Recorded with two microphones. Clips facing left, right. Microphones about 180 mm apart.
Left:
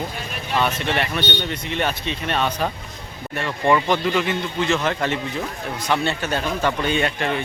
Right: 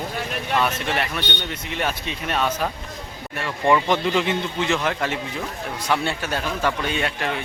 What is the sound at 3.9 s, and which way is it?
Speech, 25° right (ahead or behind).